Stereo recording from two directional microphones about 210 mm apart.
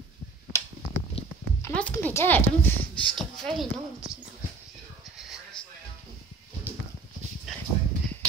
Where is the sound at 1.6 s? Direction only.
10° left (ahead or behind).